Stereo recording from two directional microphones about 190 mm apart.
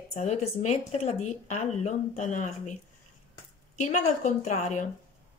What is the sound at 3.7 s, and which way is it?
Speech, 35° left (ahead or behind).